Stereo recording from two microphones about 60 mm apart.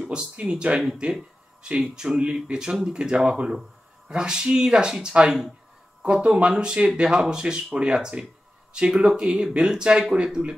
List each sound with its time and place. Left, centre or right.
0.1 s speech: centre